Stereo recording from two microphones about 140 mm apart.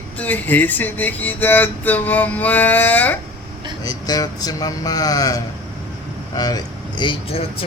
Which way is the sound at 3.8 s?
25° left (ahead or behind).